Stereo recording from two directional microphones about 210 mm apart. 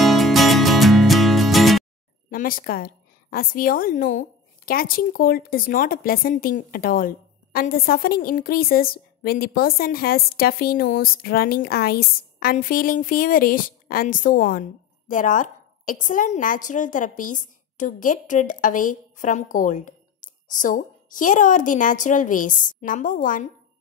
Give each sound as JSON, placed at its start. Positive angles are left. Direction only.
{"t": 0.0, "sound": "music", "side_deg": 0}
{"t": 2.3, "sound": "a woman's voice", "side_deg": 40}